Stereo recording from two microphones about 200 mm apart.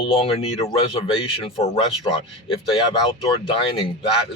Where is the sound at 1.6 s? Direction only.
25° left (ahead or behind).